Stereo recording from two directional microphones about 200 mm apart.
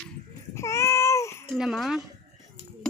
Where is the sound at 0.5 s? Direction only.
15° left (ahead or behind).